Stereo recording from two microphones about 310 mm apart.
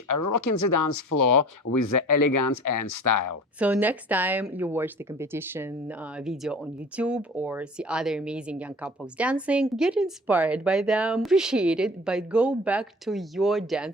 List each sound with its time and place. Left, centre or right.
0.1 s speech: left
3.6 s speech: centre